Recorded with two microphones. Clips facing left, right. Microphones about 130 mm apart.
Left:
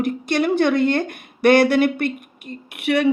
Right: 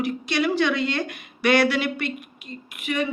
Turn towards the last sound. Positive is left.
turn(degrees=75)  # may be behind; listen again after turning